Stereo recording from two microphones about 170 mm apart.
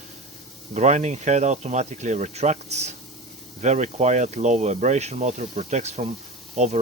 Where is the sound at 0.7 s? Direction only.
45° right (ahead or behind).